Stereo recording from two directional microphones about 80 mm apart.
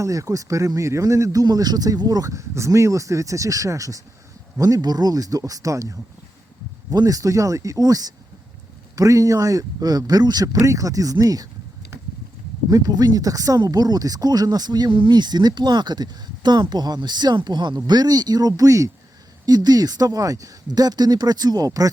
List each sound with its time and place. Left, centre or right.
0.0 s speech: right
12.7 s speech: right